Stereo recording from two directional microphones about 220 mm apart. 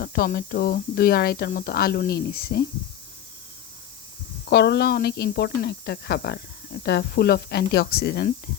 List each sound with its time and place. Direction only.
0.0 s speech: 45° left (ahead or behind)
4.4 s speech: 50° left (ahead or behind)